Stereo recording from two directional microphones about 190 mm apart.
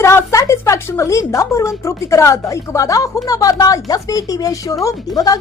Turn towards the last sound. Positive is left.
turn(degrees=20)  # may be behind; listen again after turning